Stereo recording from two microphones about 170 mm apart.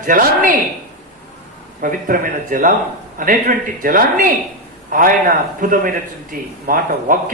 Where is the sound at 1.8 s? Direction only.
55° right (ahead or behind).